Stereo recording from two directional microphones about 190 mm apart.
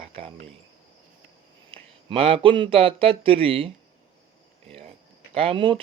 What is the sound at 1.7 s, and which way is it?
Speech, 30° right (ahead or behind).